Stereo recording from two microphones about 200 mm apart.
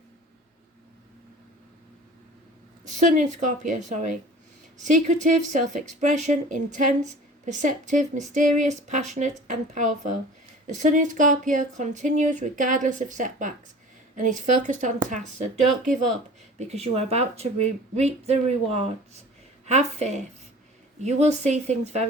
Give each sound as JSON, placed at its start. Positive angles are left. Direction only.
{"t": 2.8, "sound": "speech", "side_deg": -35}